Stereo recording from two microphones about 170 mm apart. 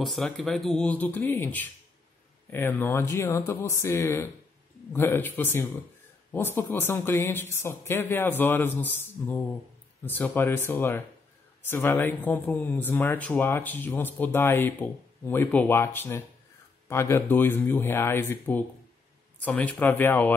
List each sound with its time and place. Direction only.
0.0 s speech: centre (ahead or behind)